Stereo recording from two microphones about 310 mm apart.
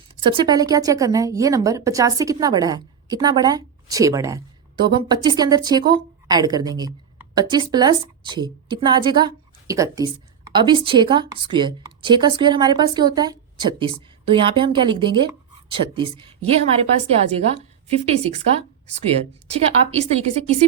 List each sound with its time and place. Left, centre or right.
0.3 s a woman's voice: centre